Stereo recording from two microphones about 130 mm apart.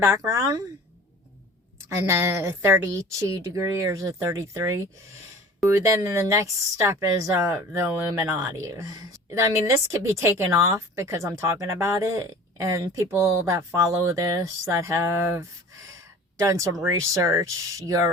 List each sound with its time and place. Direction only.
0.0 s a woman's voice: 20° right (ahead or behind)
1.9 s a woman's voice: 20° right (ahead or behind)